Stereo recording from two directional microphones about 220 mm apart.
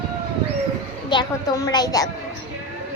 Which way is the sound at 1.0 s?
20° left (ahead or behind).